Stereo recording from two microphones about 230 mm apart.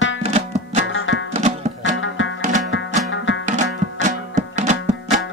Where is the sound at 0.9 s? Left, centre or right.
Left.